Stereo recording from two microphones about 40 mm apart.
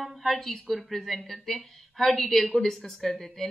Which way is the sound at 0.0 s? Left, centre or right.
Centre.